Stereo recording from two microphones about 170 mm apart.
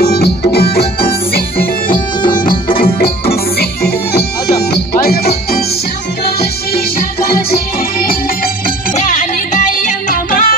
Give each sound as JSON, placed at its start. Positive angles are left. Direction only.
{"t": 0.0, "sound": "music", "side_deg": 70}
{"t": 2.8, "sound": "music", "side_deg": 65}
{"t": 6.7, "sound": "music", "side_deg": 60}
{"t": 8.9, "sound": "music", "side_deg": 50}